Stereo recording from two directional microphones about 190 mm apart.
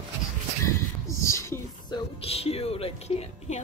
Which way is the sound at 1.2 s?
15° left (ahead or behind).